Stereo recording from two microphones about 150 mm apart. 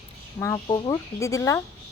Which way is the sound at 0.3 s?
20° left (ahead or behind).